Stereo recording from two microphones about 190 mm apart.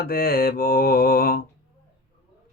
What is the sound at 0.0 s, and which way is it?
Mantra, 50° left (ahead or behind).